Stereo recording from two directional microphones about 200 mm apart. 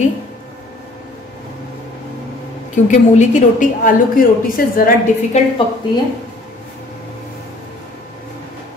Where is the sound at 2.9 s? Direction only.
40° left (ahead or behind).